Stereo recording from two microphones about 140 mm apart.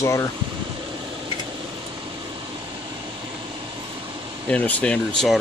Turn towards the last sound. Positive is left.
turn(degrees=5)  # may be behind; listen again after turning